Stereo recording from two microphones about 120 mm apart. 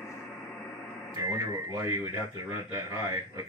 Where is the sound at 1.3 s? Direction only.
25° right (ahead or behind).